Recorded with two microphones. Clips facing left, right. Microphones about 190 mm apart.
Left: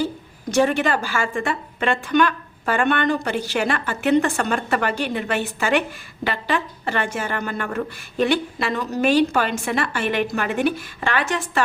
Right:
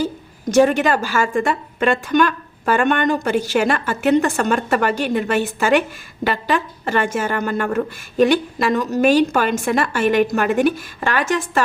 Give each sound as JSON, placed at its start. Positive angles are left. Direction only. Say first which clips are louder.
{"t": 0.5, "sound": "a woman's voice", "louder": "right 4 dB", "side_deg": -45}